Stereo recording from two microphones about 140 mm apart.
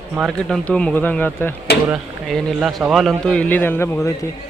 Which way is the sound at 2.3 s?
Centre (ahead or behind).